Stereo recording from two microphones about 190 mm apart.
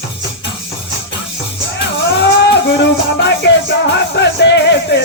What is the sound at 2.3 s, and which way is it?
Music, 60° left (ahead or behind).